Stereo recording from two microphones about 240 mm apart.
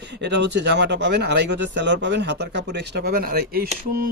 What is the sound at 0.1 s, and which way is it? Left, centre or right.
Speech, right.